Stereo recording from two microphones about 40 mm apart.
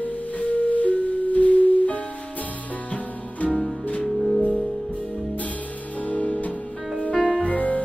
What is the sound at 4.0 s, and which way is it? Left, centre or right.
Music, centre.